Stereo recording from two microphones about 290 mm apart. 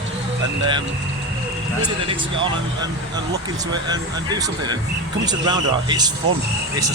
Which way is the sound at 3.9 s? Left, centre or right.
Centre.